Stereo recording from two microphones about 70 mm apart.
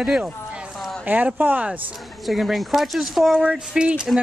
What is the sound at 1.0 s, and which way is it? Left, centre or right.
Speech, right.